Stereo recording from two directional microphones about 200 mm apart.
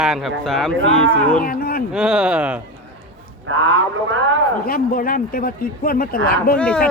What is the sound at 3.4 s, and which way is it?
Speech, 75° right (ahead or behind).